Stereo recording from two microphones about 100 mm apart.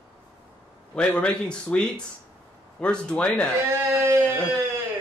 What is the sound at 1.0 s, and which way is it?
Speech, 10° left (ahead or behind).